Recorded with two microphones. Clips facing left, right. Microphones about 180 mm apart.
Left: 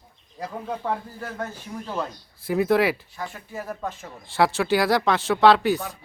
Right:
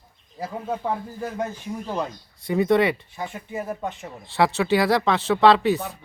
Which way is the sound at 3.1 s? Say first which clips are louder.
Right 3 dB; 20° right (ahead or behind).